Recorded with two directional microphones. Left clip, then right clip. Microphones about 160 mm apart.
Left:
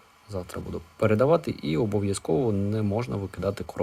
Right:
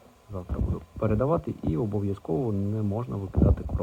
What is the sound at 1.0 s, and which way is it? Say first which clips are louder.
Speech: left 5 dB; 25° left (ahead or behind).